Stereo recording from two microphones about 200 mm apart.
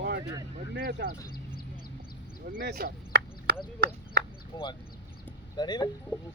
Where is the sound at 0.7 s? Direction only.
60° right (ahead or behind).